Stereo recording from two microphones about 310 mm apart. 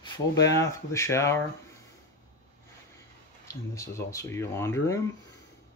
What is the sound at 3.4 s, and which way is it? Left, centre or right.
Speech, centre.